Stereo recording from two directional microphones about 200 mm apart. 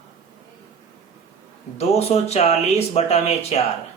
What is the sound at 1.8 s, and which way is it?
A man's voice, 30° left (ahead or behind).